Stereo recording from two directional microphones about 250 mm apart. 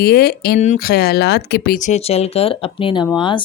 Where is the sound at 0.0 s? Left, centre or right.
Left.